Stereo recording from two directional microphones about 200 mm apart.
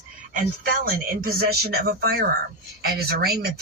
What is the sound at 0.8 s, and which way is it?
Speech, 50° right (ahead or behind).